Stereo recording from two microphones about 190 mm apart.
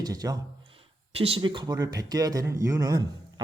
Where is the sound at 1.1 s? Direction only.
30° right (ahead or behind).